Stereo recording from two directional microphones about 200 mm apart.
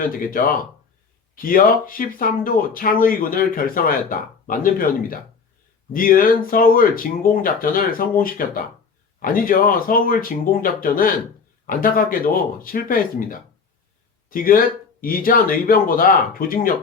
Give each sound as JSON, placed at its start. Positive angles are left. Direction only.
{"t": 0.0, "sound": "speech", "side_deg": 45}